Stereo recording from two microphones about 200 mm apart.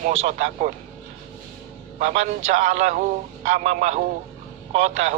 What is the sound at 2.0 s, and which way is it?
A man's voice, 35° right (ahead or behind).